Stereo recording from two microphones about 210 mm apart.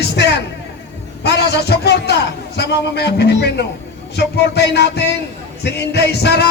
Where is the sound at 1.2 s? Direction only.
55° left (ahead or behind).